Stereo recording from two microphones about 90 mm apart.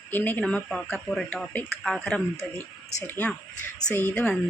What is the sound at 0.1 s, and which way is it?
Speech, 20° left (ahead or behind).